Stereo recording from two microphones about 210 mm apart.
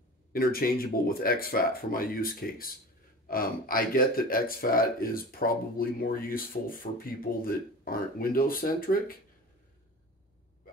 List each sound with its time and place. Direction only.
0.3 s speech: 45° left (ahead or behind)